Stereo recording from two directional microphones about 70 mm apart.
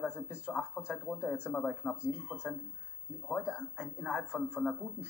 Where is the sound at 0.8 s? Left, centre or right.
Centre.